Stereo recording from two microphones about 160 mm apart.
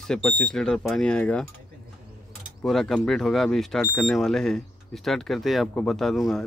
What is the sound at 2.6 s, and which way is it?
Speech, 5° left (ahead or behind).